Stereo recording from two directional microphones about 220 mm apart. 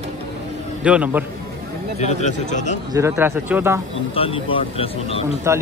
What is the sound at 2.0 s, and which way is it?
Speech, 30° left (ahead or behind).